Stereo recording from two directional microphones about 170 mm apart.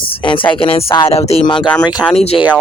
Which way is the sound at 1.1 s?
35° left (ahead or behind).